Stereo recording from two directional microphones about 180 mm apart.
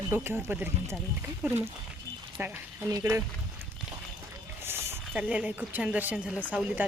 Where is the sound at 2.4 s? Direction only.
10° right (ahead or behind).